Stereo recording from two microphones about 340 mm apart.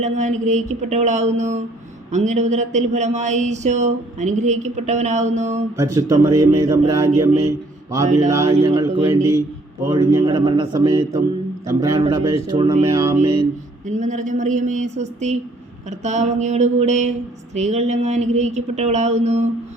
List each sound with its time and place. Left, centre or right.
0.0 s speech: right
5.7 s speech: centre